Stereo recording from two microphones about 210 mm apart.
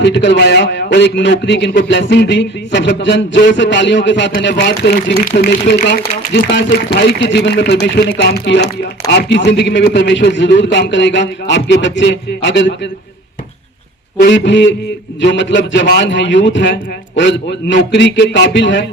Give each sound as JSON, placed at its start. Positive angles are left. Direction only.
{"t": 0.0, "sound": "a man's voice", "side_deg": 55}
{"t": 14.2, "sound": "a man's voice", "side_deg": 60}